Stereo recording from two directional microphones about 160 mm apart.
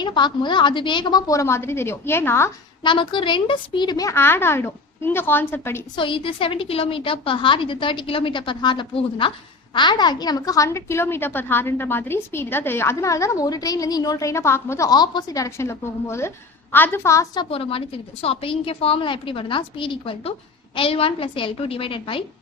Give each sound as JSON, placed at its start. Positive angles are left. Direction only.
{"t": 0.0, "sound": "a woman's voice", "side_deg": 30}
{"t": 2.8, "sound": "a woman's voice", "side_deg": 30}
{"t": 6.0, "sound": "a woman's voice", "side_deg": 30}
{"t": 17.5, "sound": "a woman's voice", "side_deg": 35}